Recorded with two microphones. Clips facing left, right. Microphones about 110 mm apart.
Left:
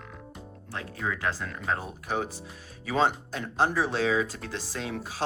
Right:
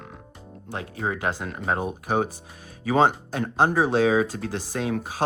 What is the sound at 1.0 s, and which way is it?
Speech, 35° right (ahead or behind).